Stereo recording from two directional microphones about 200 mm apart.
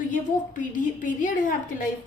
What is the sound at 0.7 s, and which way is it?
A woman's voice, 40° left (ahead or behind).